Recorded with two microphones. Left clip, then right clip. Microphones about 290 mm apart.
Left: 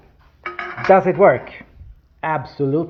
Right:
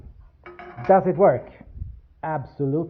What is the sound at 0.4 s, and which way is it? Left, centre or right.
Dishes, centre.